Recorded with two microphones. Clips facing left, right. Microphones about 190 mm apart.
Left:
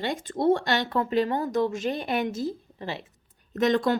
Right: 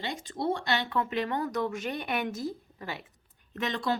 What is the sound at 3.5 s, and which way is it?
Speech, 45° left (ahead or behind).